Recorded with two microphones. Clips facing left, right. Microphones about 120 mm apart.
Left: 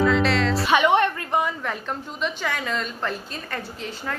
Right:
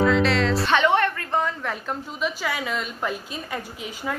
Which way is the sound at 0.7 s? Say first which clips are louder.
Left 2 dB; 15° left (ahead or behind).